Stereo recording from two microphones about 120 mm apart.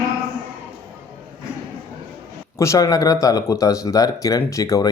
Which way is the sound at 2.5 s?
25° left (ahead or behind).